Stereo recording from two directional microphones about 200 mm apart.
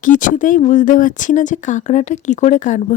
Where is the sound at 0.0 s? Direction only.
40° left (ahead or behind).